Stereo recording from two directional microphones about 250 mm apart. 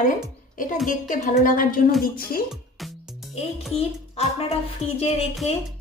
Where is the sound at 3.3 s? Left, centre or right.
Left.